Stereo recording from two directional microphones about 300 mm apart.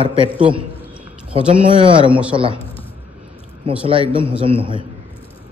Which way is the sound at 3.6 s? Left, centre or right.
Centre.